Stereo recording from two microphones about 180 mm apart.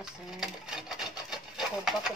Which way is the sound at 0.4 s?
5° right (ahead or behind).